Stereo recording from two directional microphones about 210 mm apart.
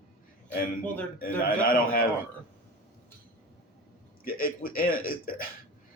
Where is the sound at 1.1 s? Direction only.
45° left (ahead or behind).